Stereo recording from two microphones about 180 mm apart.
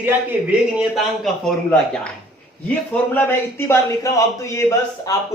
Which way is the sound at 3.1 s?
15° left (ahead or behind).